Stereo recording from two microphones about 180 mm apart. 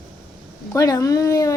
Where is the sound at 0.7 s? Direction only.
15° left (ahead or behind).